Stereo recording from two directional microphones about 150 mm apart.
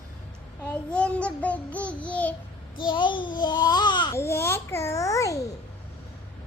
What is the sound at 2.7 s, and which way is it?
Babbling, 30° left (ahead or behind).